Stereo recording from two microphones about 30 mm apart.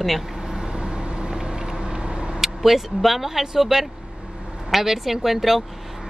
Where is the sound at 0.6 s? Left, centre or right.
Right.